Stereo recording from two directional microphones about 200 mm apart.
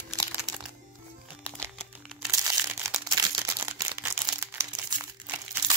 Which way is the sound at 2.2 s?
15° right (ahead or behind).